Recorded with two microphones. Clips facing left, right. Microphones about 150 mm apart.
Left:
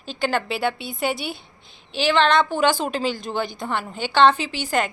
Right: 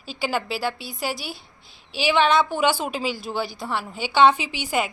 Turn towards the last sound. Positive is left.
turn(degrees=-10)  # may be behind; listen again after turning